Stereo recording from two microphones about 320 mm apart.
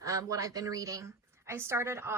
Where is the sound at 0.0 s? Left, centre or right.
Centre.